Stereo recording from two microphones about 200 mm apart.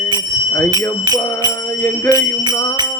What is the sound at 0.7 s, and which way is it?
Music, 20° right (ahead or behind).